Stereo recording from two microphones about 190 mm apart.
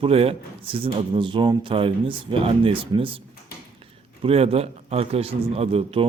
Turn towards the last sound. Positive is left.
turn(degrees=-30)  # may be behind; listen again after turning